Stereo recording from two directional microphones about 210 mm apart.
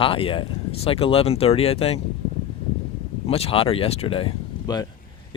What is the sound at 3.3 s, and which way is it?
Speech, 25° left (ahead or behind).